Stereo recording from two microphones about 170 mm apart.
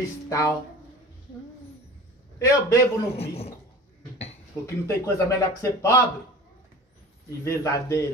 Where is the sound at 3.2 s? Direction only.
35° left (ahead or behind).